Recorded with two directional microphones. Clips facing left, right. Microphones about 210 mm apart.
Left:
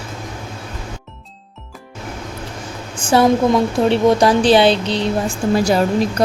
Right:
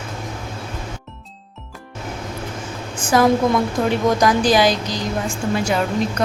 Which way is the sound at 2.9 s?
30° left (ahead or behind).